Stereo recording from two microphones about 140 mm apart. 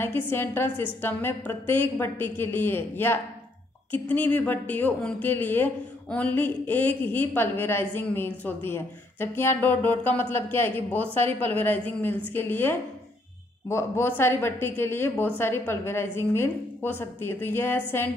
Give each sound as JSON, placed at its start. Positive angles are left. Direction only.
{"t": 0.0, "sound": "a woman's voice", "side_deg": 15}